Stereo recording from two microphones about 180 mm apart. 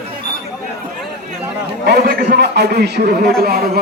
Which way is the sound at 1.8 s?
65° right (ahead or behind).